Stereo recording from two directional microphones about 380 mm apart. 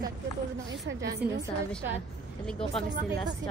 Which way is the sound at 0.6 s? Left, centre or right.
Right.